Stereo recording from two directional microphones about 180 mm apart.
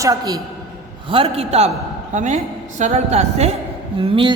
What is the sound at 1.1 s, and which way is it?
A woman's voice, 30° right (ahead or behind).